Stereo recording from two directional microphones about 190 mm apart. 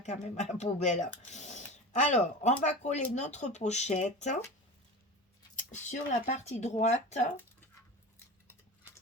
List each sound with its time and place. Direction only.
0.0 s speech: 35° left (ahead or behind)
5.5 s speech: 40° left (ahead or behind)